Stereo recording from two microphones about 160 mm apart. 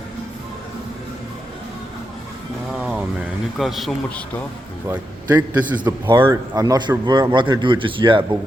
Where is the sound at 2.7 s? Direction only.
5° right (ahead or behind).